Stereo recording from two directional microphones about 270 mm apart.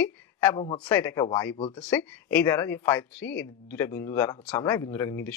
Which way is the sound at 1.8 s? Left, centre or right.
Centre.